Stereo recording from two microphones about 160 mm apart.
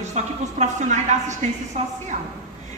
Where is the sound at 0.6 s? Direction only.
50° right (ahead or behind).